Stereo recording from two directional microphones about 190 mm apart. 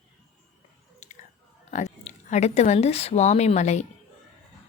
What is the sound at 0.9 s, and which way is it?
Chewing, 40° left (ahead or behind).